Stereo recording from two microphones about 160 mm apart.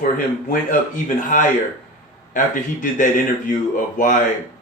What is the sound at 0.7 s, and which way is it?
Speech, 55° left (ahead or behind).